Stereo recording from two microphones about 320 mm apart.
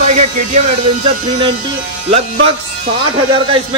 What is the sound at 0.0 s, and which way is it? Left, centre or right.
Music, right.